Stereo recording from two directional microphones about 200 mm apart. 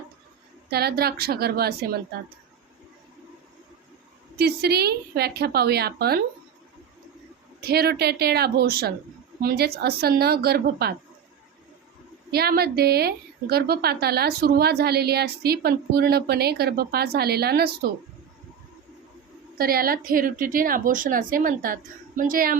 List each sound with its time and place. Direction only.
0.7 s a woman's voice: 50° right (ahead or behind)
4.4 s a woman's voice: 50° right (ahead or behind)
7.6 s a woman's voice: 50° right (ahead or behind)
12.3 s a woman's voice: 50° right (ahead or behind)
19.5 s a woman's voice: 45° right (ahead or behind)